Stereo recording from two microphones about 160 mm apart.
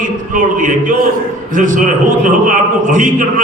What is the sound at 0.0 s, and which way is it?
A man's voice, 55° right (ahead or behind).